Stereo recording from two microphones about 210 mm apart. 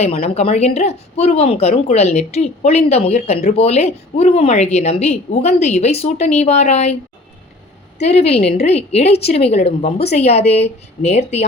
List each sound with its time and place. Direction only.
0.0 s speech: 30° left (ahead or behind)
7.9 s a woman's voice: 30° left (ahead or behind)